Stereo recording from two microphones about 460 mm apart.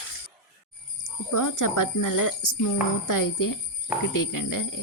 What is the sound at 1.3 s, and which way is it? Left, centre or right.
Speech, left.